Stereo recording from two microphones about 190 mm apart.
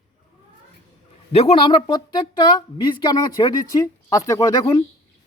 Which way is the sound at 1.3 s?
30° left (ahead or behind).